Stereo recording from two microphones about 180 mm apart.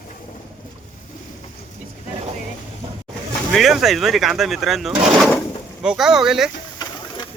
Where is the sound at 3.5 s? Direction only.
Centre (ahead or behind).